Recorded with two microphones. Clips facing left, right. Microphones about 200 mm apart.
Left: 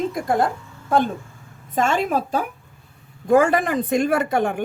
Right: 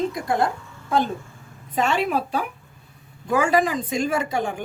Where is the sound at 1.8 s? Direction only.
45° left (ahead or behind).